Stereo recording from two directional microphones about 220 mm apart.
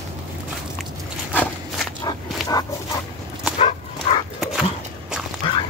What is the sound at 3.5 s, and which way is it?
Bow-wow, 30° left (ahead or behind).